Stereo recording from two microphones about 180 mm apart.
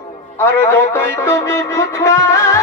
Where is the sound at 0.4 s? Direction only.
10° left (ahead or behind).